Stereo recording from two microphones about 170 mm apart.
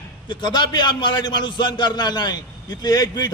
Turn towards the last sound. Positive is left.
turn(degrees=25)  # may be behind; listen again after turning